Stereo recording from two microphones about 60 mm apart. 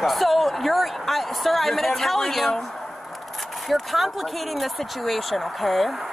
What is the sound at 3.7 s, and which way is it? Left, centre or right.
Speech, centre.